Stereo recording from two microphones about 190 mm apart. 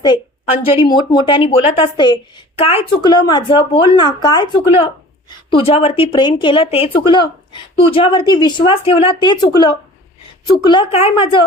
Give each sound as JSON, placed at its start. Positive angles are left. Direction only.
{"t": 0.9, "sound": "speech", "side_deg": 25}